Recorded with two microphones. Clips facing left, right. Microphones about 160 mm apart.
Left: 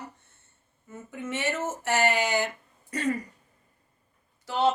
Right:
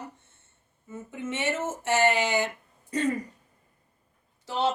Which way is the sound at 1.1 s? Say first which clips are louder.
Right 1 dB; 20° right (ahead or behind).